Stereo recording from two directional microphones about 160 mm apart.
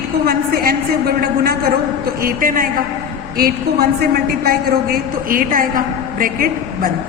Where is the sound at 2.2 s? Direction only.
60° right (ahead or behind).